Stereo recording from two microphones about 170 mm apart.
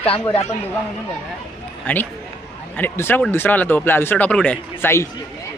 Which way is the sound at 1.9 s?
10° left (ahead or behind).